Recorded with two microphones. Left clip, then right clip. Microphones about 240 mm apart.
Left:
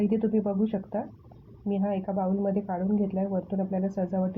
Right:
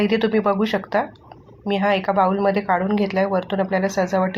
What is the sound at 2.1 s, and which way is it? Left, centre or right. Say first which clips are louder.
Speech: right 11 dB; right.